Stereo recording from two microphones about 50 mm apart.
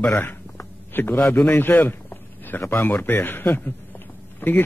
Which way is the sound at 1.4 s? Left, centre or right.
Left.